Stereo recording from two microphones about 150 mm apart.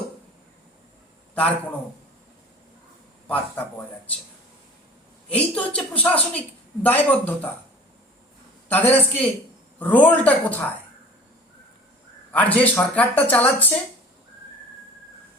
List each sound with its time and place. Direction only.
3.2 s speech: 10° left (ahead or behind)
5.3 s speech: 10° left (ahead or behind)
8.7 s speech: 10° left (ahead or behind)
12.3 s speech: 10° left (ahead or behind)